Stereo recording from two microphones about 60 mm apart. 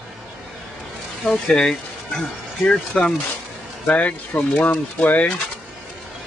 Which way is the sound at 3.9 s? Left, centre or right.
Left.